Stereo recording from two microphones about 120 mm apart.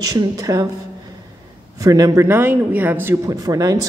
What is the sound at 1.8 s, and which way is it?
Speech, 30° right (ahead or behind).